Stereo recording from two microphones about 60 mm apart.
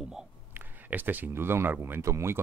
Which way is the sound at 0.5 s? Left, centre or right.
Right.